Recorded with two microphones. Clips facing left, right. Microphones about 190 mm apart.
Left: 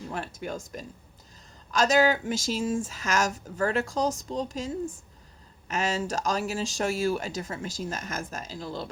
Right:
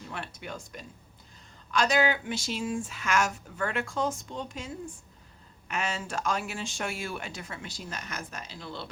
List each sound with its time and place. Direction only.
0.1 s speech: 40° left (ahead or behind)